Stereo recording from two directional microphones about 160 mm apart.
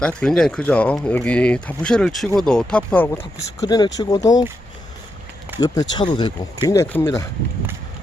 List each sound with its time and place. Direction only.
0.0 s speech: 5° left (ahead or behind)
3.6 s speech: 25° left (ahead or behind)
5.5 s speech: 25° left (ahead or behind)